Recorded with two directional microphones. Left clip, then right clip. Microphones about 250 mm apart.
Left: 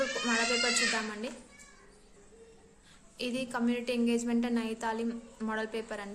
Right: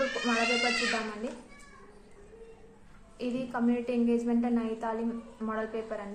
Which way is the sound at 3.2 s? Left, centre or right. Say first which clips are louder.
Right 1 dB; left.